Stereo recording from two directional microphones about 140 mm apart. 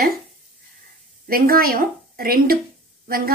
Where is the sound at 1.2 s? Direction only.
90° right.